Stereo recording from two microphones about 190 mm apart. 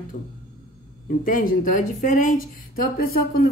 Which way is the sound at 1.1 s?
45° left (ahead or behind).